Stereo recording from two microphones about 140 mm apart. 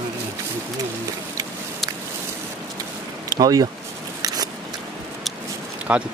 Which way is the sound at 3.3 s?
25° right (ahead or behind).